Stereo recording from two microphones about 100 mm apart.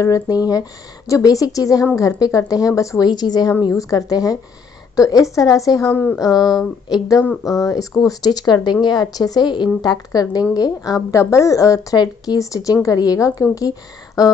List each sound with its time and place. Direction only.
0.0 s a woman's voice: 40° left (ahead or behind)